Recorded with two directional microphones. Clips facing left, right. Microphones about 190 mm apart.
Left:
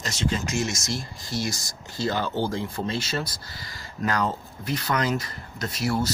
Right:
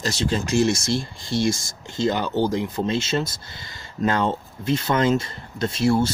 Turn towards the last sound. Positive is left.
turn(degrees=-25)  # may be behind; listen again after turning